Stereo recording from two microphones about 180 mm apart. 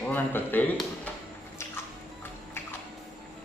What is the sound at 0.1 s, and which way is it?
Speech, 10° left (ahead or behind).